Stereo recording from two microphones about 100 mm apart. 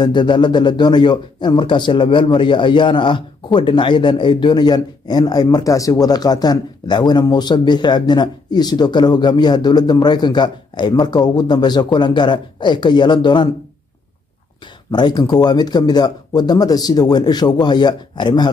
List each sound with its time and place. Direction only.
0.0 s a man's voice: 50° left (ahead or behind)
14.9 s a man's voice: 45° left (ahead or behind)